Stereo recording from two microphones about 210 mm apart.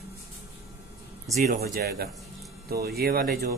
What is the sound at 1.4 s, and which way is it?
Speech, 45° right (ahead or behind).